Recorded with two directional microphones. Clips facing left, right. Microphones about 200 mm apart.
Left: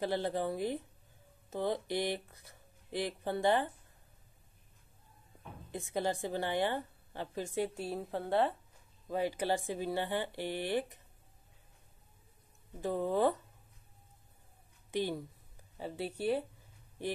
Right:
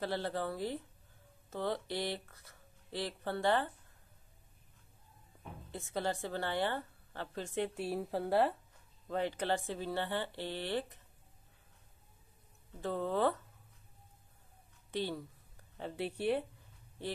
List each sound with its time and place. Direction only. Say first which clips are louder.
0.0 s a woman's voice: left 3 dB; 15° left (ahead or behind)
5.7 s a woman's voice: left 2 dB; 15° left (ahead or behind); by 8.5 s 5° right (ahead or behind)
9.0 s a woman's voice: left 2 dB; 10° left (ahead or behind)
12.8 s a woman's voice: left 2 dB; 15° left (ahead or behind)
14.9 s a woman's voice: left 3 dB; 15° left (ahead or behind)
15.8 s speech: even; centre (ahead or behind)